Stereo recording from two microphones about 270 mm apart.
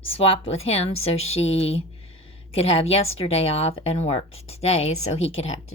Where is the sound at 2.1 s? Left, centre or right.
Left.